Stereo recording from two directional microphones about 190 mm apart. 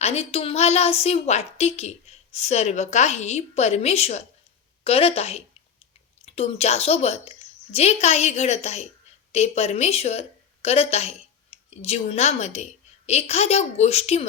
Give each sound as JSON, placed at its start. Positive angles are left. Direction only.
{"t": 0.0, "sound": "a woman's voice", "side_deg": 35}